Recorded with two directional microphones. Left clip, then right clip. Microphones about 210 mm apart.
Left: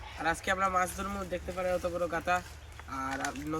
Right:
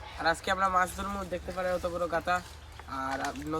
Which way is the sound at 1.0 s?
10° right (ahead or behind).